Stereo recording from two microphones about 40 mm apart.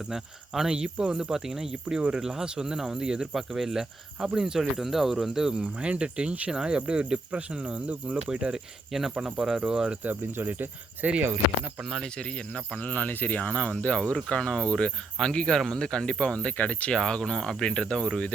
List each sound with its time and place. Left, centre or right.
0.1 s speech: centre
5.6 s speech: right
8.3 s speech: right
8.9 s speech: centre
10.0 s speech: right
11.0 s speech: right
12.0 s speech: left
12.8 s speech: left
16.9 s speech: centre